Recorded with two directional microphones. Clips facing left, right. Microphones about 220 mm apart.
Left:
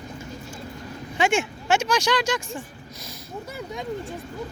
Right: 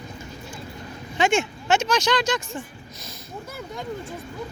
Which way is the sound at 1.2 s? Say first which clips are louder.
Right 1 dB; 10° left (ahead or behind).